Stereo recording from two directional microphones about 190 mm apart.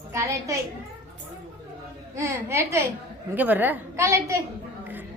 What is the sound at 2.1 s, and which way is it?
A woman's voice, 15° right (ahead or behind).